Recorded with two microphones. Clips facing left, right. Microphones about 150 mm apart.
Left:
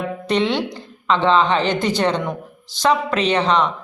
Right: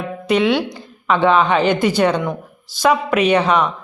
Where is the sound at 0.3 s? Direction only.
10° right (ahead or behind).